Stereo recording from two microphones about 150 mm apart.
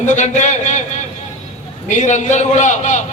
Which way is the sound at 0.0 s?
50° left (ahead or behind).